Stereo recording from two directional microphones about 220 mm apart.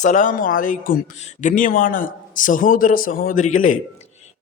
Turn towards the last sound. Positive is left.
turn(degrees=35)  # may be behind; listen again after turning